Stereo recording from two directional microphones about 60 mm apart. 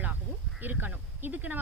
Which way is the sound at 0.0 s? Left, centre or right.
Right.